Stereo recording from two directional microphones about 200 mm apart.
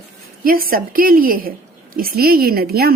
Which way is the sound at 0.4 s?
45° right (ahead or behind).